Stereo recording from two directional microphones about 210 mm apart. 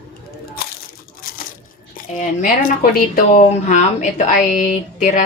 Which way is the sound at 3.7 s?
35° left (ahead or behind).